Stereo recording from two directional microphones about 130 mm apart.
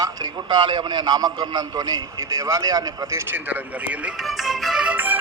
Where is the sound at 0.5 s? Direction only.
35° right (ahead or behind); by 4.3 s 10° right (ahead or behind).